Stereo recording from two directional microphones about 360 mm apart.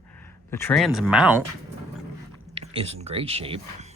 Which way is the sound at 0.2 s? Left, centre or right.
Centre.